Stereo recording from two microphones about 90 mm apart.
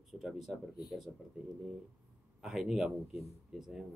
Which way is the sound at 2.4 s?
5° right (ahead or behind).